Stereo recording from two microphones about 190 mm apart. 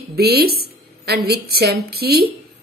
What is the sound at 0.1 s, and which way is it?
A woman's voice, 55° right (ahead or behind).